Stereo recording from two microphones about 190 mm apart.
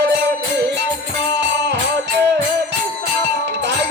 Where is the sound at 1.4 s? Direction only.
60° right (ahead or behind).